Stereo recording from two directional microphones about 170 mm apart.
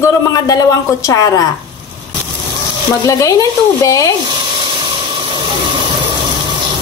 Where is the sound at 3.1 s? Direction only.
20° left (ahead or behind).